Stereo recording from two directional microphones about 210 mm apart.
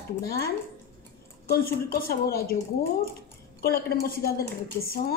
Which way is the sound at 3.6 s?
45° left (ahead or behind).